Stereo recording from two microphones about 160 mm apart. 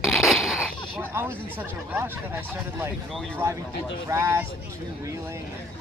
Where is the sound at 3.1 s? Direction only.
5° left (ahead or behind).